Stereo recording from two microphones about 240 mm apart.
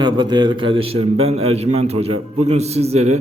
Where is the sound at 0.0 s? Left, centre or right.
Centre.